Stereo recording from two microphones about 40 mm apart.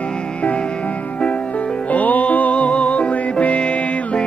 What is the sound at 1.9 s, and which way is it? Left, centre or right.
Music, left.